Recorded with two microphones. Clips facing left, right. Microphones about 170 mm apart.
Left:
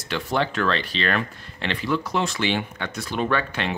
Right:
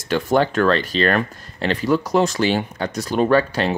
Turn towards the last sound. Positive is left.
turn(degrees=-35)  # may be behind; listen again after turning